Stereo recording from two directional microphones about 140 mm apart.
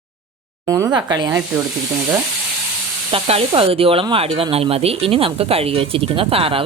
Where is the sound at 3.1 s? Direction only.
45° right (ahead or behind).